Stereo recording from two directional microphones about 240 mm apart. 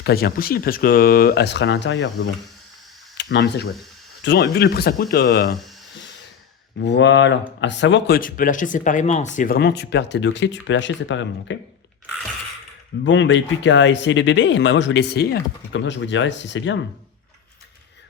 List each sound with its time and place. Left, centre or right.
0.0 s speech: left
6.7 s speech: left
13.1 s speech: left